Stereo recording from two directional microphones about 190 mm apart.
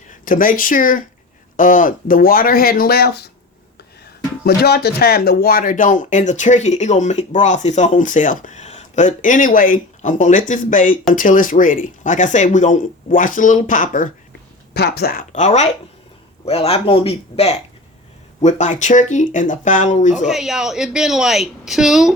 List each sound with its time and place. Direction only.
0.1 s speech: 45° left (ahead or behind)
4.4 s speech: 55° left (ahead or behind)
14.7 s speech: 60° left (ahead or behind); by 20.2 s 40° left (ahead or behind)
20.2 s a woman's voice: centre (ahead or behind)